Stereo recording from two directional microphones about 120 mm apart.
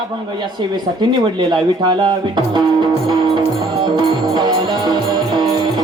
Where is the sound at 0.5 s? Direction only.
40° right (ahead or behind).